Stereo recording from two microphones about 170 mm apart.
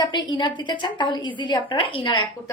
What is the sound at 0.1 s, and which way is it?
A woman's voice, 25° left (ahead or behind).